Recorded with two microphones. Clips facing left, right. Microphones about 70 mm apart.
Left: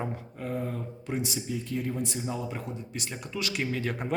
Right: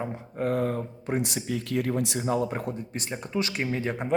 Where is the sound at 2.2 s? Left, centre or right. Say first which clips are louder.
Right 7 dB; right.